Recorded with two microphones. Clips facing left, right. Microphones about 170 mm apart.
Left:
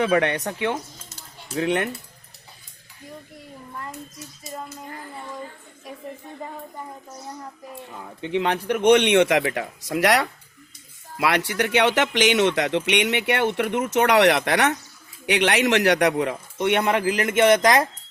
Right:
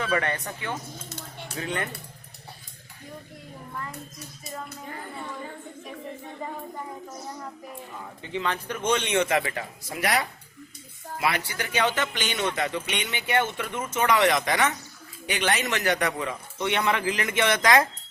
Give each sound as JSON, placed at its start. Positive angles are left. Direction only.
{"t": 0.0, "sound": "a man's voice", "side_deg": 65}
{"t": 1.5, "sound": "a man's voice", "side_deg": 70}
{"t": 8.2, "sound": "a man's voice", "side_deg": 65}